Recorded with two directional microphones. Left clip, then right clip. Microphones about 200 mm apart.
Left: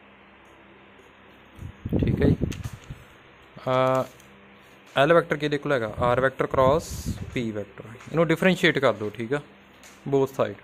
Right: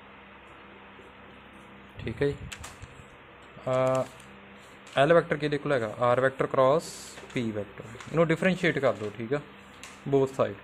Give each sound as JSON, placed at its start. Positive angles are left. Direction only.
{"t": 2.0, "sound": "speech", "side_deg": 15}
{"t": 3.6, "sound": "speech", "side_deg": 30}
{"t": 10.0, "sound": "speech", "side_deg": 15}